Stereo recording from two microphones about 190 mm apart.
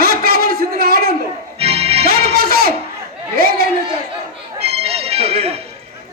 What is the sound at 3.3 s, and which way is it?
Chatter, 50° right (ahead or behind).